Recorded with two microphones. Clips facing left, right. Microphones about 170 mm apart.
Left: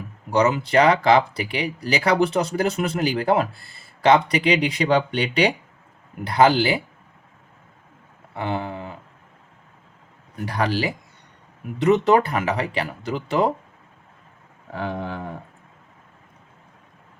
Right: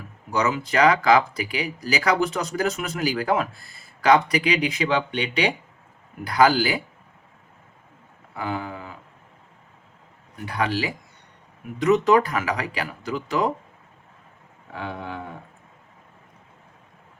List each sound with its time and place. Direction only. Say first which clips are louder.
0.3 s speech: left 4 dB; 30° left (ahead or behind)
6.2 s speech: left 2 dB; 25° left (ahead or behind)
8.3 s a sound: left 3 dB; 25° left (ahead or behind)
10.4 s speech: left 2 dB; 35° left (ahead or behind)
14.7 s speech: left 4 dB; 40° left (ahead or behind)